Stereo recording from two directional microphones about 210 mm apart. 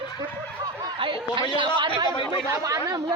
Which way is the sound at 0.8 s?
25° right (ahead or behind).